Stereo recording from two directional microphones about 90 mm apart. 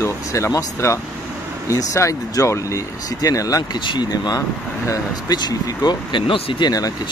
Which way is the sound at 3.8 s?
55° left (ahead or behind).